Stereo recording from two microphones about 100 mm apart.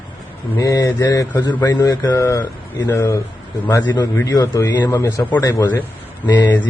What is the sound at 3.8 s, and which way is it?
Speech, 45° left (ahead or behind).